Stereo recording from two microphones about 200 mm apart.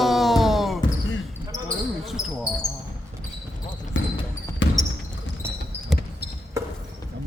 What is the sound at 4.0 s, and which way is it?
Basketball bounce, 70° left (ahead or behind).